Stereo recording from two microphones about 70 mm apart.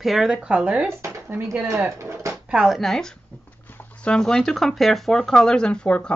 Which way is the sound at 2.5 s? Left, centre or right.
Centre.